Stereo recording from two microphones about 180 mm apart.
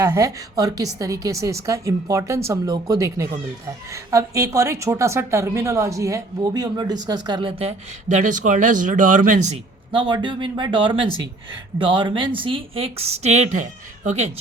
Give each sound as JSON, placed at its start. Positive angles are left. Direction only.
{"t": 0.0, "sound": "a woman's voice", "side_deg": -20}
{"t": 9.9, "sound": "a woman's voice", "side_deg": -25}